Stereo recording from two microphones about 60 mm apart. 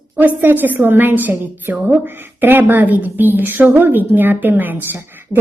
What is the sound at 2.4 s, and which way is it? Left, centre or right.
A woman's voice, right.